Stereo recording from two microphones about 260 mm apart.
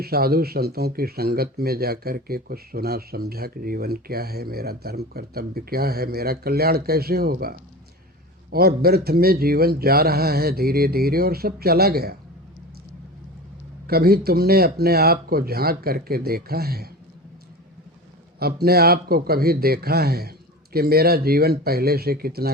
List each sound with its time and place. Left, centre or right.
0.0 s speech: right
13.8 s speech: right
18.3 s speech: right